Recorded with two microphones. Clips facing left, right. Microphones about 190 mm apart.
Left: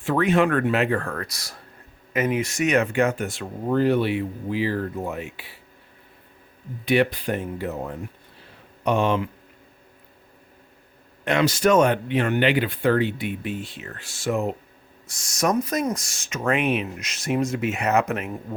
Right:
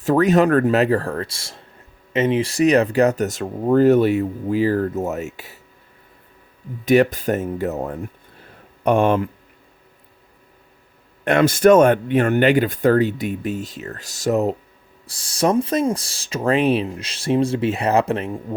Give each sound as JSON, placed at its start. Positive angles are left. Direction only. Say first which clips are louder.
{"t": 0.0, "sound": "speech", "louder": "right 5 dB", "side_deg": -40}
{"t": 6.8, "sound": "speech", "louder": "right 5 dB", "side_deg": -45}
{"t": 11.3, "sound": "speech", "louder": "right 6 dB", "side_deg": -50}